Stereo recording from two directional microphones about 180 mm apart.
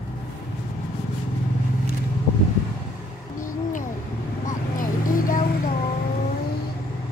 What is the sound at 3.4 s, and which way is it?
Hoot, 45° left (ahead or behind).